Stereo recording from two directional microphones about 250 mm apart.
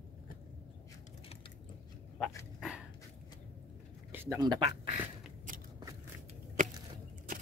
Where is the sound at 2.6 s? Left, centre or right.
Centre.